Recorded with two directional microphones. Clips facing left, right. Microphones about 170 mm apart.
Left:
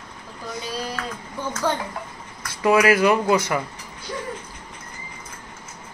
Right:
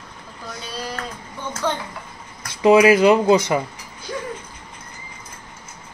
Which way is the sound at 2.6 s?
20° right (ahead or behind).